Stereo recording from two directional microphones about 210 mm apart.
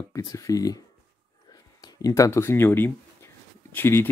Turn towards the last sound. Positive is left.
turn(degrees=10)  # may be behind; listen again after turning